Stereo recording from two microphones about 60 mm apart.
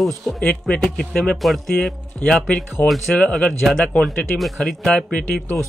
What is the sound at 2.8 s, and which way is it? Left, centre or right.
Speech, left.